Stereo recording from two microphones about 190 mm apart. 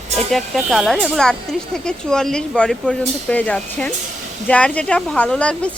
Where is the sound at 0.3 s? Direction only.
Centre (ahead or behind).